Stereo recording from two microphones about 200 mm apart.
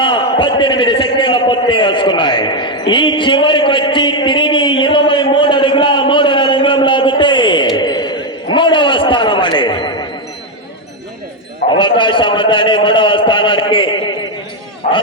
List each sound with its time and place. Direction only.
0.0 s a man's voice: 25° left (ahead or behind)
11.7 s a man's voice: 25° left (ahead or behind)